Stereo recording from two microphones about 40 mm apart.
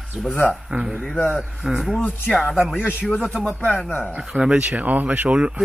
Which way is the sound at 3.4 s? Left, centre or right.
Left.